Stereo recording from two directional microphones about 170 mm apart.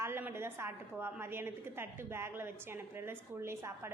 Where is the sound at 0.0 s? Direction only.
10° right (ahead or behind).